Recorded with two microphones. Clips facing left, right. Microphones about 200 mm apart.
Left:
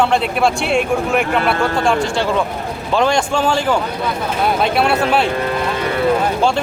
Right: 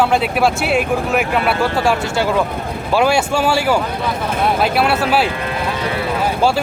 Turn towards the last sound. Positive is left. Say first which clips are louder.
# even
turn(degrees=-5)  # may be behind; listen again after turning